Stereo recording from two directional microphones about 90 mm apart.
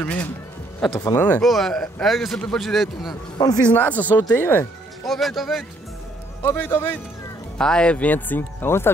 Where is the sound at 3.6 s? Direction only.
20° left (ahead or behind).